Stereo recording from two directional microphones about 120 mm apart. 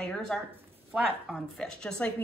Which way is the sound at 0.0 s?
5° left (ahead or behind).